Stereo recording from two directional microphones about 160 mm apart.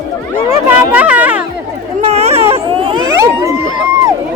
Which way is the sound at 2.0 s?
40° right (ahead or behind).